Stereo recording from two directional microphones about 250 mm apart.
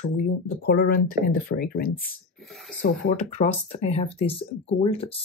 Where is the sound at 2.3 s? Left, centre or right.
Centre.